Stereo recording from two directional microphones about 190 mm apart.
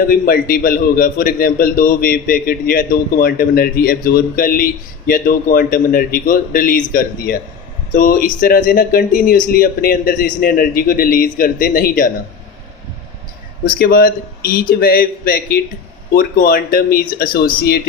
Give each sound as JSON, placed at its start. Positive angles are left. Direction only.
{"t": 0.1, "sound": "a man's voice", "side_deg": 50}
{"t": 13.7, "sound": "a man's voice", "side_deg": 50}